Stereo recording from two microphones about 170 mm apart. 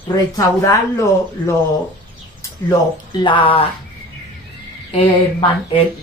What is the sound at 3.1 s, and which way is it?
Speech, 30° left (ahead or behind).